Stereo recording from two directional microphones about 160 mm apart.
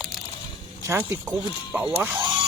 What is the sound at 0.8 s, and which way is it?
Speech, 15° right (ahead or behind).